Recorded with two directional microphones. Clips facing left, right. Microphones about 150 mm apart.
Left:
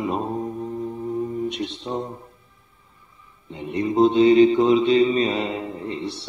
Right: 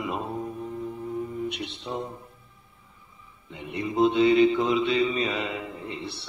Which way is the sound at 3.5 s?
35° left (ahead or behind).